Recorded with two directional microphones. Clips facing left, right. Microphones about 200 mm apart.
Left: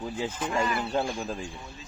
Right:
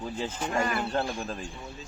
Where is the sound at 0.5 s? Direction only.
50° right (ahead or behind).